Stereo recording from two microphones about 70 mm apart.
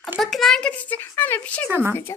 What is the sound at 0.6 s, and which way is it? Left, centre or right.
Speech, left.